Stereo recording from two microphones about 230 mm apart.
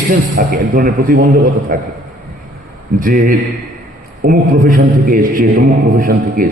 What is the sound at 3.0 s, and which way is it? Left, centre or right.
A man's voice, right.